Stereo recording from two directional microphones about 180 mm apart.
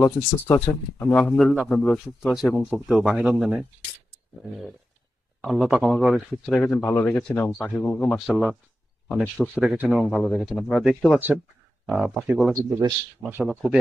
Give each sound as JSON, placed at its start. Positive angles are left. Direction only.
{"t": 0.0, "sound": "speech", "side_deg": 15}
{"t": 2.9, "sound": "speech", "side_deg": -5}
{"t": 5.4, "sound": "speech", "side_deg": 0}
{"t": 9.6, "sound": "speech", "side_deg": -5}
{"t": 10.0, "sound": "speech", "side_deg": 5}
{"t": 12.5, "sound": "a man's voice", "side_deg": -20}
{"t": 13.5, "sound": "speech", "side_deg": -10}